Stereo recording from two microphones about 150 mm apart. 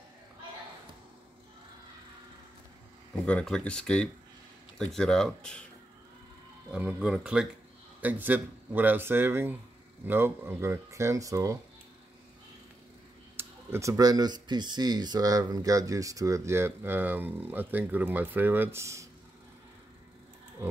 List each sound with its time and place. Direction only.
3.3 s speech: 5° left (ahead or behind)
6.7 s speech: 5° right (ahead or behind)
13.4 s speech: 15° right (ahead or behind)